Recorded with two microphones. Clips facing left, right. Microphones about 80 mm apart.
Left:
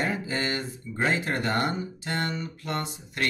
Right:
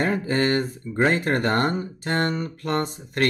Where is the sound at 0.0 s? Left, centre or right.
Right.